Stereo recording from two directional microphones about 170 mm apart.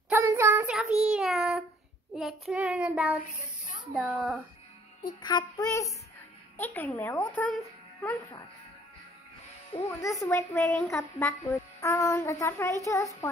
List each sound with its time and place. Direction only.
0.1 s child singing: 15° right (ahead or behind)
1.1 s child singing: centre (ahead or behind)
3.9 s a child's voice: 5° right (ahead or behind)
5.0 s child singing: 25° left (ahead or behind)
6.5 s a woman's voice: 10° left (ahead or behind)
9.8 s child singing: 20° left (ahead or behind)
10.9 s a woman's voice: 15° left (ahead or behind)
12.8 s child singing: 20° left (ahead or behind)